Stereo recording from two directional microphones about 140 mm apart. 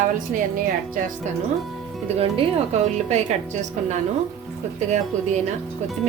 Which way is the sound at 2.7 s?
50° right (ahead or behind).